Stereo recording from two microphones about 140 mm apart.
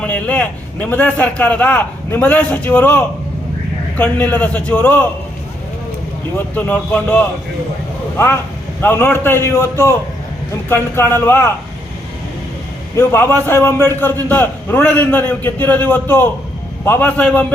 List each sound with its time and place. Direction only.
0.0 s a man's voice: 10° left (ahead or behind)
6.3 s a man's voice: 10° left (ahead or behind)
8.8 s a man's voice: 15° left (ahead or behind)
13.0 s a man's voice: 15° left (ahead or behind)